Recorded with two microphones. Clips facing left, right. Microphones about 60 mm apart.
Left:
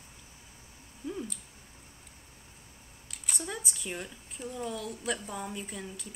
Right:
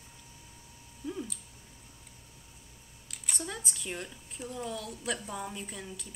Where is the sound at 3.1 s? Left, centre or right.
Centre.